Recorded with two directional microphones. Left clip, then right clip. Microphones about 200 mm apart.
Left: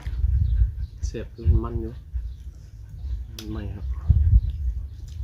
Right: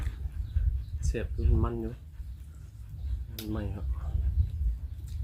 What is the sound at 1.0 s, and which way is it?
Speech, 10° right (ahead or behind).